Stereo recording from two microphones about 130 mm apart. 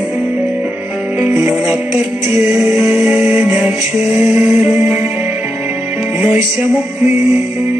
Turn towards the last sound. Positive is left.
turn(degrees=-10)  # may be behind; listen again after turning